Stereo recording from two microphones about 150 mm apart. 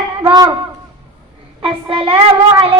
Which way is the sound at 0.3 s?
25° right (ahead or behind).